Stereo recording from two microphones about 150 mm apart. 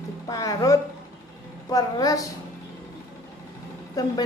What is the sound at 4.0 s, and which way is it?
Speech, 25° left (ahead or behind).